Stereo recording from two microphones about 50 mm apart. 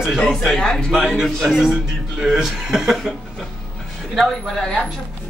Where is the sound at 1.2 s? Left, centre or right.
Centre.